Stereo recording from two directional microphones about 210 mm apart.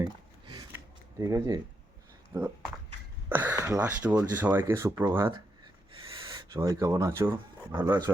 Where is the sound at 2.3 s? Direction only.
15° right (ahead or behind).